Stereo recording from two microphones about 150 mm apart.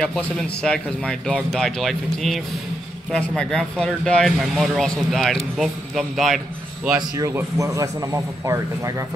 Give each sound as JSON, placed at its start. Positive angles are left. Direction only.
{"t": 0.0, "sound": "speech", "side_deg": 5}
{"t": 7.0, "sound": "a man's voice", "side_deg": -20}